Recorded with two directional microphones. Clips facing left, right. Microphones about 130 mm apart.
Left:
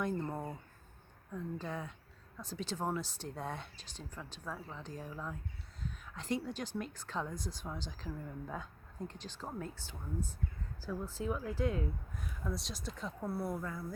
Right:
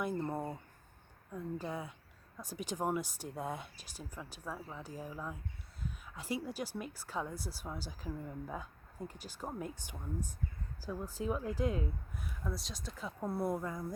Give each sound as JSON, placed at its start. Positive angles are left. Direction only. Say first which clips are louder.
{"t": 0.0, "sound": "a woman's voice", "louder": "right 1 dB", "side_deg": -10}
{"t": 12.2, "sound": "speech", "louder": "left 1 dB", "side_deg": 0}
{"t": 13.2, "sound": "speech", "louder": "right 3 dB", "side_deg": -20}